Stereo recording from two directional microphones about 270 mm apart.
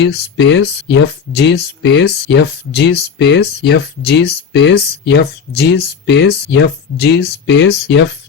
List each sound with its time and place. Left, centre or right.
0.0 s speech: left